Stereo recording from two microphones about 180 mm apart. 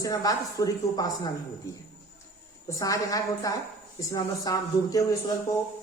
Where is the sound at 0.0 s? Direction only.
20° left (ahead or behind).